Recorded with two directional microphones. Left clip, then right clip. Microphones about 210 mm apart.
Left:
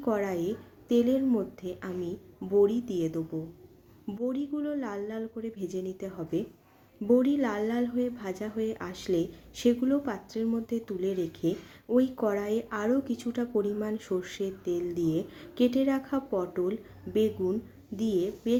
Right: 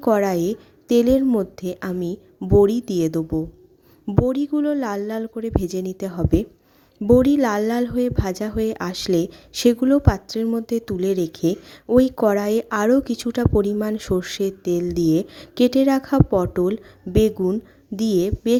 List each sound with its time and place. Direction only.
0.0 s a woman's voice: 45° right (ahead or behind)